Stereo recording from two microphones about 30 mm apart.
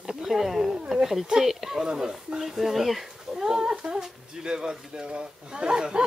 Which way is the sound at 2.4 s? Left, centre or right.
Centre.